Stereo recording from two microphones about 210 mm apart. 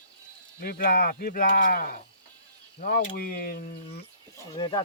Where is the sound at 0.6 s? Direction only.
45° left (ahead or behind).